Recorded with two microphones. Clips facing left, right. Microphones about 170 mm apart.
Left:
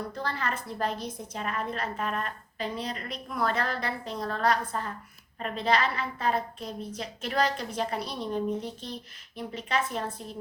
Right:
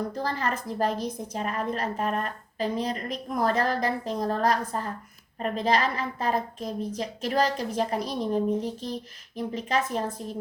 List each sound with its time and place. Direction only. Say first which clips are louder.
0.1 s a woman's voice: right 4 dB; 40° right (ahead or behind)